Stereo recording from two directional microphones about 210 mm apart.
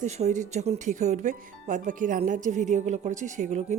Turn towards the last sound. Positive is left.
turn(degrees=-35)  # may be behind; listen again after turning